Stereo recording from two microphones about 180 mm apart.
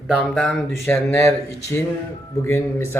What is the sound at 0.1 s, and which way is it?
Speech, 5° right (ahead or behind).